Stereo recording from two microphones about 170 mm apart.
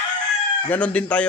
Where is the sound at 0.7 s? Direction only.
10° left (ahead or behind).